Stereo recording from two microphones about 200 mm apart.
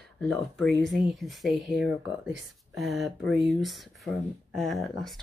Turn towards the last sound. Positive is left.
turn(degrees=0)  # may be behind; listen again after turning